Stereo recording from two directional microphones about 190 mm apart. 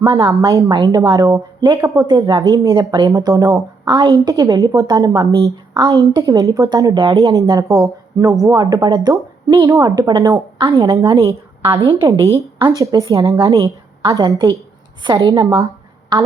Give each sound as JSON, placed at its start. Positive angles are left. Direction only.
{"t": 0.0, "sound": "a woman's voice", "side_deg": -20}